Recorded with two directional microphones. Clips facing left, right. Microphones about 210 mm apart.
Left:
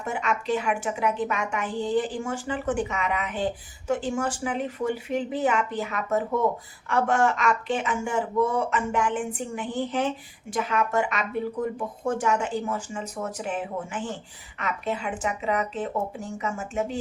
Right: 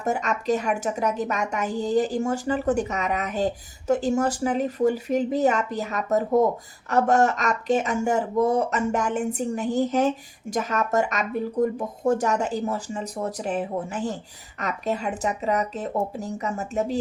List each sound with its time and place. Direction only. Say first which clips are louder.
0.0 s a woman's voice: right 3 dB; 40° right (ahead or behind)